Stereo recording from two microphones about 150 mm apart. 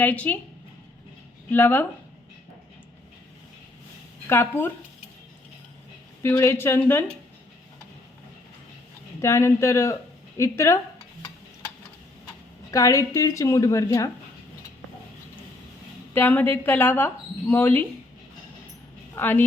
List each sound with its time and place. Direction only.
0.0 s a woman's voice: 10° left (ahead or behind)
1.5 s a woman's voice: 15° left (ahead or behind)
4.3 s a woman's voice: 15° left (ahead or behind)
6.2 s a woman's voice: 20° left (ahead or behind)
9.2 s a woman's voice: 20° left (ahead or behind)
12.7 s a woman's voice: 20° left (ahead or behind)
16.1 s a woman's voice: 15° left (ahead or behind)
19.1 s a woman's voice: 15° left (ahead or behind)